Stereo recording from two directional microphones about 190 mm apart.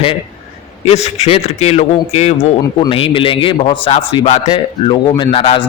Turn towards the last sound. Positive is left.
turn(degrees=30)  # may be behind; listen again after turning